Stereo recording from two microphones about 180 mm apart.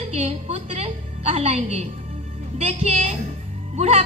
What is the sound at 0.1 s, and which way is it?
Music, 35° right (ahead or behind).